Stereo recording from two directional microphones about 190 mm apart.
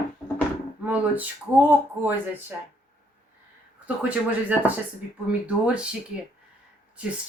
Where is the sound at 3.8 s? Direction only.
10° right (ahead or behind).